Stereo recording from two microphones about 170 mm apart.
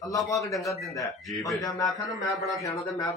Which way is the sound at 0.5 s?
20° left (ahead or behind).